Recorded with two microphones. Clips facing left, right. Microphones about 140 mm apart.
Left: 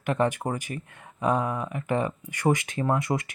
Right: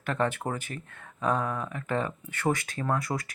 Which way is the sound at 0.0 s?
15° left (ahead or behind).